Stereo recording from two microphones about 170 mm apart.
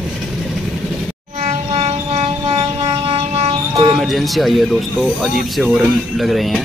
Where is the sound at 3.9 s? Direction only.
Centre (ahead or behind).